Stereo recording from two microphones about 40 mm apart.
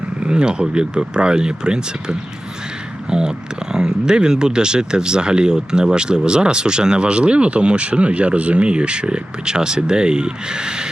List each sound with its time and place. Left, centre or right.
0.2 s speech: right